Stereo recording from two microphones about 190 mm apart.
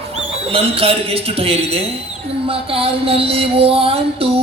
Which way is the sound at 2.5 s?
30° right (ahead or behind).